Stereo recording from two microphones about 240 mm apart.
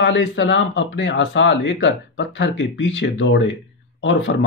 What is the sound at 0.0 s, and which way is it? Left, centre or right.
Speech, left.